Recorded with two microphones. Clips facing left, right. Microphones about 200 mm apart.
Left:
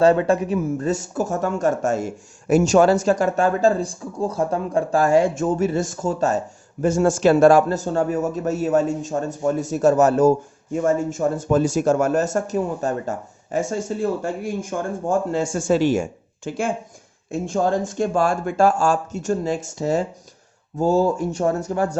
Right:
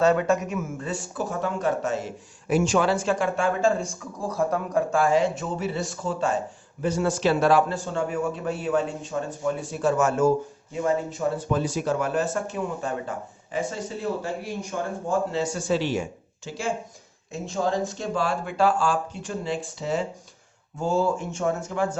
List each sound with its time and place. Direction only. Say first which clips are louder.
0.0 s speech: left 5 dB; 30° left (ahead or behind)